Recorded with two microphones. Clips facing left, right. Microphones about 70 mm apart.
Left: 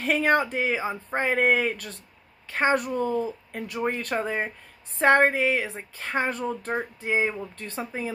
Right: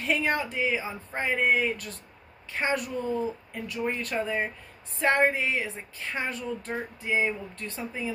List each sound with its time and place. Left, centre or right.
0.0 s speech: left
2.5 s speech: left